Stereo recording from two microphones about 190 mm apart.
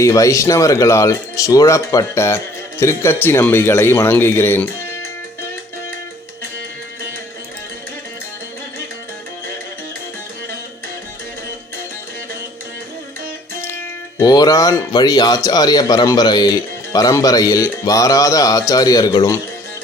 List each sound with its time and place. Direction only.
0.0 s speech: 15° left (ahead or behind)
14.2 s a man's voice: 20° left (ahead or behind)